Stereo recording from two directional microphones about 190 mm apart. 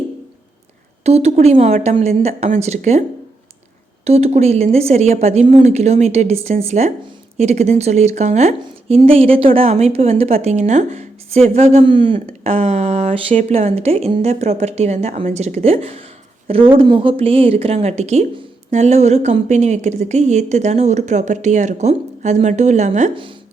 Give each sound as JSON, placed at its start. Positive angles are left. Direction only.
{"t": 1.0, "sound": "a woman's voice", "side_deg": -35}
{"t": 4.0, "sound": "a woman's voice", "side_deg": -35}